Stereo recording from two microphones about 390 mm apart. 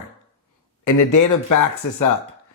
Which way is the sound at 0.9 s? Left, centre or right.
Left.